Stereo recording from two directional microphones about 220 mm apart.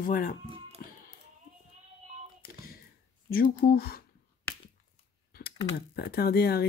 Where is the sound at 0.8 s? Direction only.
40° left (ahead or behind).